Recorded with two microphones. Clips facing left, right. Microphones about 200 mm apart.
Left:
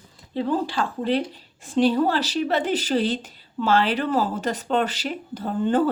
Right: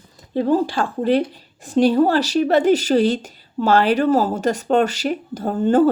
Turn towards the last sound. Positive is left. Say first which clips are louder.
# right 5 dB
turn(degrees=-45)  # may be behind; listen again after turning